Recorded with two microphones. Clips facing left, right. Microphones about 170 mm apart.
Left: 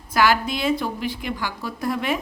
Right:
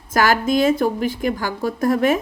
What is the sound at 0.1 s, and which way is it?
A woman's voice, 45° right (ahead or behind).